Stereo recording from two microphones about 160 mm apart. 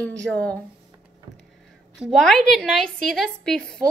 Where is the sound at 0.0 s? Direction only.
10° left (ahead or behind).